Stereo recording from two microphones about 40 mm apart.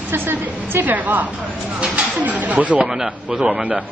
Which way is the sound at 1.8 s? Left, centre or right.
Right.